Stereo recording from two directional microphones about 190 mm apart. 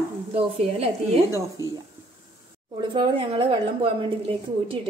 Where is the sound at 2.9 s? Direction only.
25° right (ahead or behind).